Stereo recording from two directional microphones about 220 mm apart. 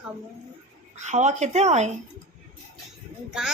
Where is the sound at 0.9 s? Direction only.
30° right (ahead or behind).